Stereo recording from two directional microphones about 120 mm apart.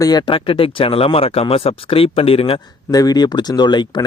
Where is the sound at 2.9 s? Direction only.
30° left (ahead or behind).